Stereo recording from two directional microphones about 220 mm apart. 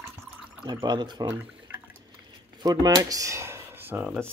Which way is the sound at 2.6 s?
15° right (ahead or behind).